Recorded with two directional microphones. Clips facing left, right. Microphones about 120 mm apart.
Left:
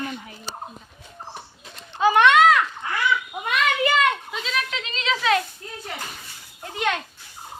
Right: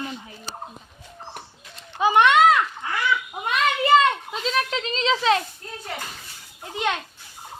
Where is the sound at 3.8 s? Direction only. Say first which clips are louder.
Right 7 dB; 30° right (ahead or behind).